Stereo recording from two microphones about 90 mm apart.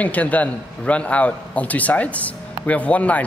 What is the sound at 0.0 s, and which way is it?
A man's voice, 15° left (ahead or behind).